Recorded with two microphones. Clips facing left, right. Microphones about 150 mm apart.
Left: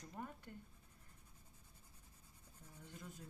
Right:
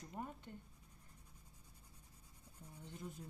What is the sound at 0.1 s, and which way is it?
Speech, 20° right (ahead or behind).